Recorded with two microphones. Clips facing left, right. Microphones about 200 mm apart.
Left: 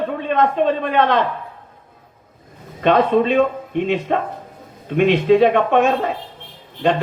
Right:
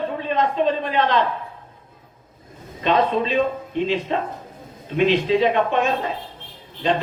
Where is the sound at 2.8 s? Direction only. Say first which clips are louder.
Left 5 dB; 55° left (ahead or behind).